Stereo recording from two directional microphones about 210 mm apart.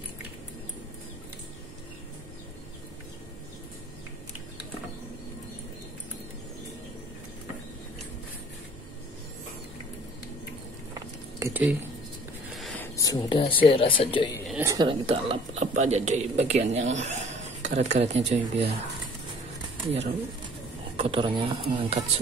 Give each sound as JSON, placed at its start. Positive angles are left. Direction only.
{"t": 11.0, "sound": "a sound", "side_deg": -15}
{"t": 12.5, "sound": "speech", "side_deg": 5}
{"t": 14.5, "sound": "a woman's voice", "side_deg": -15}
{"t": 19.8, "sound": "speech", "side_deg": -25}